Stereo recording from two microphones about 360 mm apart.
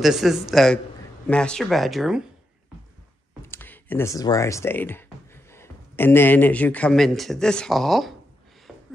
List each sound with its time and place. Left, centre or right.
0.0 s speech: centre
3.4 s speech: centre
8.7 s a sound: centre